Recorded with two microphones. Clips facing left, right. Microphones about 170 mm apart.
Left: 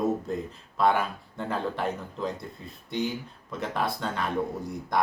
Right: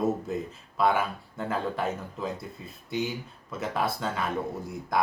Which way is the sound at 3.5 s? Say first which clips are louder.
Even; 5° right (ahead or behind).